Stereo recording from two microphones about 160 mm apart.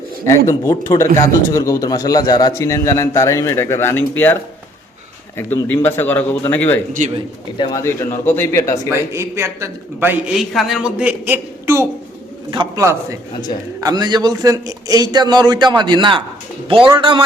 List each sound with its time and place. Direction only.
0.3 s a man's voice: 20° left (ahead or behind)
5.4 s a man's voice: 10° left (ahead or behind)
9.1 s a woman's voice: 15° right (ahead or behind)
10.3 s a woman's voice: centre (ahead or behind); by 11.9 s 15° right (ahead or behind)
12.5 s a man's voice: 30° right (ahead or behind)